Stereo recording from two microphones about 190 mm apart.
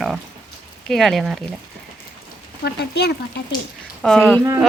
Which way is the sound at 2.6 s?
60° left (ahead or behind).